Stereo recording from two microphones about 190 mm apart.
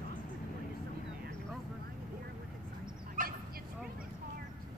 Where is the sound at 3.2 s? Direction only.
45° right (ahead or behind).